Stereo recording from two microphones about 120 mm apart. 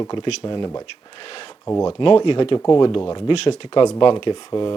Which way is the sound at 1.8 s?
45° left (ahead or behind).